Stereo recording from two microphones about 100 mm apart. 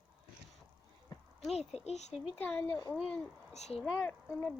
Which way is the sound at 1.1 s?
50° left (ahead or behind).